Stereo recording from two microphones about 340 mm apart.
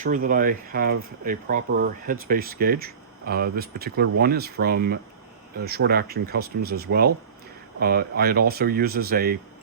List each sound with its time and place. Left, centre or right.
0.0 s speech: right